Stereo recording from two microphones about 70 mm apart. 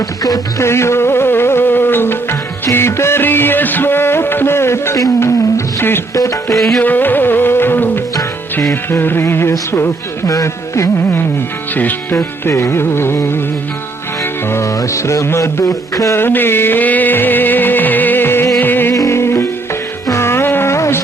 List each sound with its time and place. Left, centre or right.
0.6 s music: left
6.1 s music: left
6.6 s music: centre
6.8 s music: left
10.2 s speech: left
11.7 s music: left
12.5 s music: left
14.8 s music: left
16.1 s music: left
18.9 s music: left
20.1 s a sound: left